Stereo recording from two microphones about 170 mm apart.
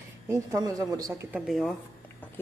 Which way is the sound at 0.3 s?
20° right (ahead or behind).